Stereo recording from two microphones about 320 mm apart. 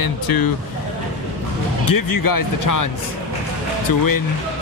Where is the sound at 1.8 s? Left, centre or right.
Left.